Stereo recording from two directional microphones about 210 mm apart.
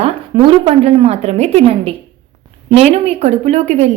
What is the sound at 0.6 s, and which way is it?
A woman's voice, 30° right (ahead or behind).